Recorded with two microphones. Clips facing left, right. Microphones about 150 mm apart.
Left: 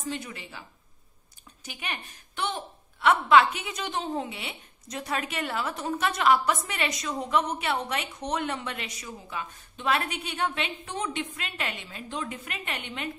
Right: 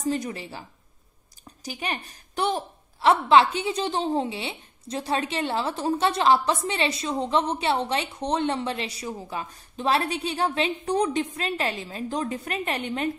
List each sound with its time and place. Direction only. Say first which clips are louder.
0.0 s a woman's voice: right 8 dB; 40° right (ahead or behind)